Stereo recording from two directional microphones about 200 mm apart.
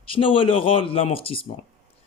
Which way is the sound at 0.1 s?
25° left (ahead or behind).